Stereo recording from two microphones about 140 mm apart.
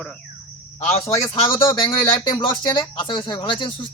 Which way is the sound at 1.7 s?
35° left (ahead or behind).